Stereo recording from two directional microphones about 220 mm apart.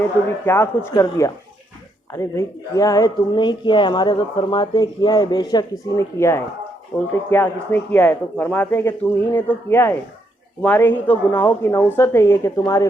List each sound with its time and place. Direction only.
0.4 s speech: 10° left (ahead or behind)